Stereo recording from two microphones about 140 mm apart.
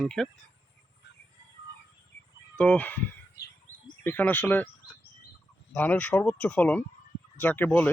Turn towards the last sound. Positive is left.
turn(degrees=10)  # may be behind; listen again after turning